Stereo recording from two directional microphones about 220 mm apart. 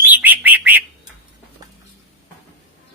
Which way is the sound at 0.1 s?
10° right (ahead or behind).